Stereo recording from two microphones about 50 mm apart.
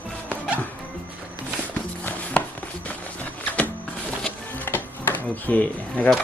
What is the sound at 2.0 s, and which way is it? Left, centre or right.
Chopping, left.